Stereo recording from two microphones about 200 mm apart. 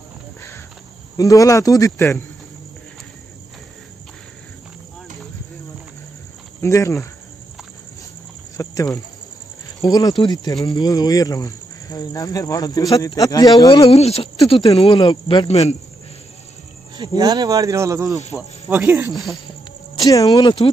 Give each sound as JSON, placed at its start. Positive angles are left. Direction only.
{"t": 1.1, "sound": "speech", "side_deg": 15}
{"t": 6.6, "sound": "speech", "side_deg": 15}
{"t": 8.5, "sound": "speech", "side_deg": 15}
{"t": 16.9, "sound": "speech", "side_deg": -20}
{"t": 20.0, "sound": "speech", "side_deg": 20}